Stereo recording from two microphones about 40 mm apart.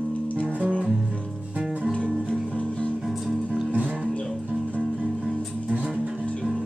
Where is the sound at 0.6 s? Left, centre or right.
Right.